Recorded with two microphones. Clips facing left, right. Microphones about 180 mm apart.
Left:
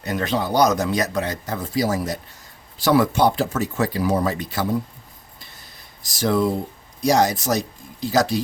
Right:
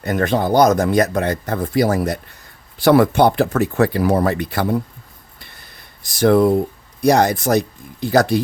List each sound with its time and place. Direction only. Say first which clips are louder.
0.0 s speech: right 5 dB; 55° right (ahead or behind)
5.4 s a sound: right 4 dB; 60° right (ahead or behind)
7.0 s speech: right 4 dB; 60° right (ahead or behind)